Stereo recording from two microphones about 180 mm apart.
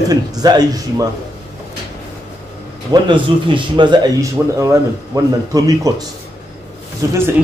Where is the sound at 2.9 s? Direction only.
25° right (ahead or behind).